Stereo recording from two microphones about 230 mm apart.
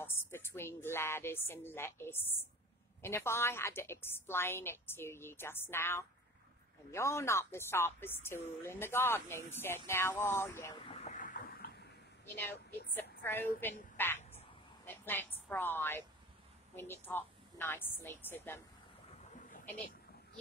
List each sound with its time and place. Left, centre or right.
0.0 s a woman's voice: centre
10.8 s a sound: left
12.9 s a woman's voice: centre